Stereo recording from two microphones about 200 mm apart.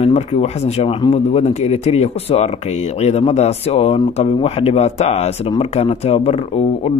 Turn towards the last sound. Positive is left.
turn(degrees=30)  # may be behind; listen again after turning